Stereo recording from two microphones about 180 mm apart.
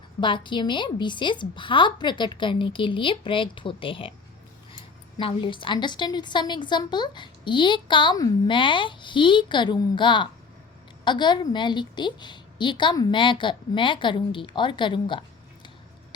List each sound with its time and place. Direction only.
0.2 s a woman's voice: 25° left (ahead or behind)